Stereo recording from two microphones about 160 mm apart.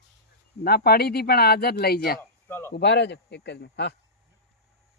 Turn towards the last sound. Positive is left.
turn(degrees=90)